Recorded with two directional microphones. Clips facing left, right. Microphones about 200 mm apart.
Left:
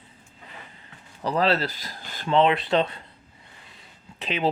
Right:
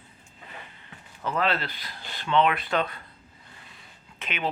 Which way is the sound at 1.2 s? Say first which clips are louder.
Left 4 dB; 35° left (ahead or behind).